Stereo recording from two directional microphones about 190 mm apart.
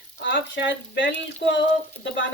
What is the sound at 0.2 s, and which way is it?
Speech, 75° left (ahead or behind).